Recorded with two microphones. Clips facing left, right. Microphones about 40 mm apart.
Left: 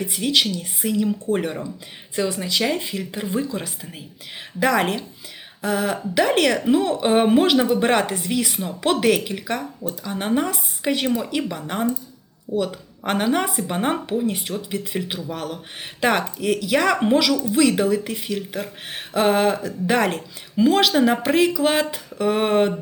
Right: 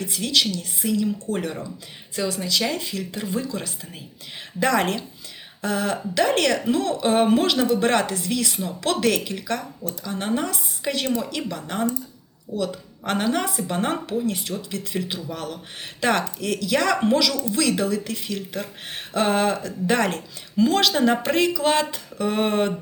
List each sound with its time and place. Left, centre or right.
0.0 s speech: centre